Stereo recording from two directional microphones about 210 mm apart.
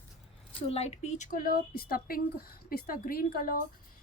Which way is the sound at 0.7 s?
30° left (ahead or behind).